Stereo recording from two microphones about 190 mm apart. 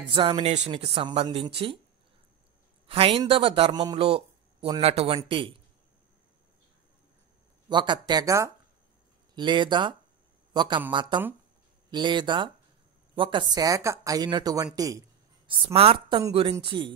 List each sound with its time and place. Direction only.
0.1 s a man's voice: 25° right (ahead or behind)
2.9 s a man's voice: 30° right (ahead or behind)
7.7 s a man's voice: 25° right (ahead or behind)
14.8 s a sound: 20° right (ahead or behind)
15.7 s a woman's voice: 30° right (ahead or behind)